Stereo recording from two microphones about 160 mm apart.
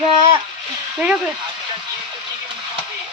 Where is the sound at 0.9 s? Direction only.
5° right (ahead or behind).